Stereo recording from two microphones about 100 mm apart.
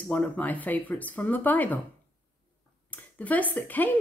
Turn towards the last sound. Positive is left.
turn(degrees=20)  # may be behind; listen again after turning